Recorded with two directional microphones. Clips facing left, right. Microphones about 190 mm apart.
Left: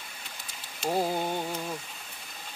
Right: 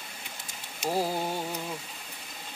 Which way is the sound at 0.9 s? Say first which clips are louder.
Left 1 dB; 5° right (ahead or behind).